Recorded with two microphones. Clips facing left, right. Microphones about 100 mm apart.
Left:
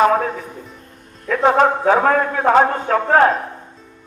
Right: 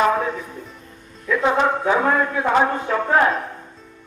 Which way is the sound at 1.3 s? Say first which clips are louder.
Left 4 dB; 50° left (ahead or behind).